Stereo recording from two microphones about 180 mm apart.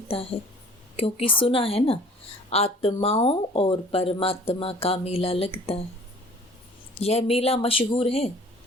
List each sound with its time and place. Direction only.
0.1 s speech: 30° left (ahead or behind)
7.0 s speech: 35° left (ahead or behind)